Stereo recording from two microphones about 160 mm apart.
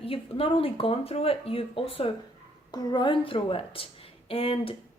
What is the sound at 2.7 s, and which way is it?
Speech, 25° left (ahead or behind).